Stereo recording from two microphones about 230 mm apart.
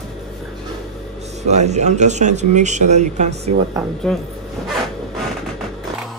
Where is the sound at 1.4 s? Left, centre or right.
Right.